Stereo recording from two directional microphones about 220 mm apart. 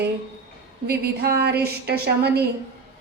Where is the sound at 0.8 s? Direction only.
45° right (ahead or behind).